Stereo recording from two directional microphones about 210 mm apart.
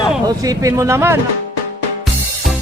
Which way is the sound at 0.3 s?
15° right (ahead or behind).